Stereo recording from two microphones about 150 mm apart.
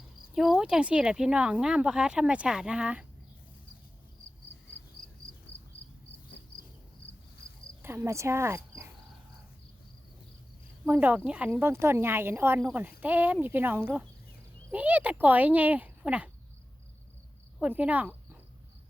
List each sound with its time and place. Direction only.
0.3 s speech: 5° right (ahead or behind)
7.8 s speech: 15° right (ahead or behind)
10.8 s speech: 15° right (ahead or behind)
17.6 s speech: 10° right (ahead or behind)